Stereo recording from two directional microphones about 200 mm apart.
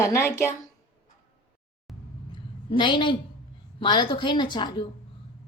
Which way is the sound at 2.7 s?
25° left (ahead or behind).